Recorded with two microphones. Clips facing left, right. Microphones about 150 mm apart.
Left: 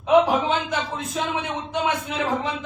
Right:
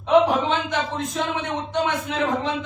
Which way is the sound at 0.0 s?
5° left (ahead or behind).